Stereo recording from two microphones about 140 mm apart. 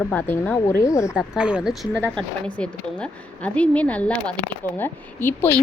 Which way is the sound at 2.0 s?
10° left (ahead or behind).